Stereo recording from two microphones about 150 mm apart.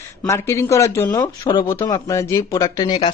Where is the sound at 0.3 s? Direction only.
20° left (ahead or behind).